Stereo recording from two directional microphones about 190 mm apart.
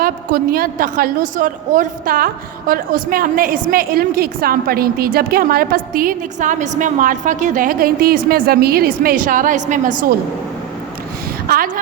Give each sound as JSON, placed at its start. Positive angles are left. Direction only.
{"t": 0.0, "sound": "a woman's voice", "side_deg": -50}
{"t": 11.4, "sound": "speech", "side_deg": -50}